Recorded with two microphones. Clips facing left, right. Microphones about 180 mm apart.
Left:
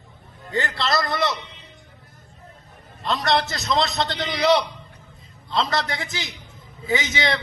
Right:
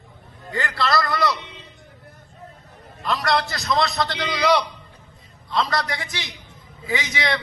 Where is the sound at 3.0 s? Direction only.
25° left (ahead or behind).